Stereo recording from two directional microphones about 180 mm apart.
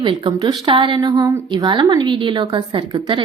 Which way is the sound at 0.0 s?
25° right (ahead or behind).